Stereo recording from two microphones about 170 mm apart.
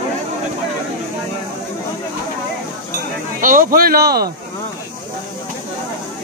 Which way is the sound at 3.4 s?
55° right (ahead or behind).